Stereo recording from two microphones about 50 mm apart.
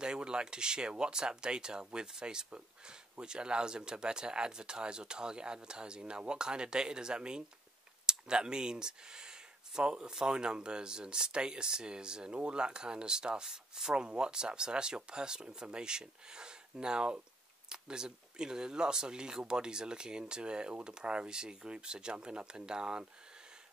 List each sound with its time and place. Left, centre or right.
0.0 s speech: centre